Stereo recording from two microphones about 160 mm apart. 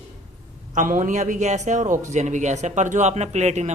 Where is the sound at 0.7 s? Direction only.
55° right (ahead or behind).